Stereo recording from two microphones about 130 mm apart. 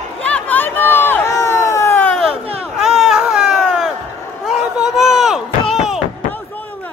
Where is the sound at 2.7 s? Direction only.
5° right (ahead or behind).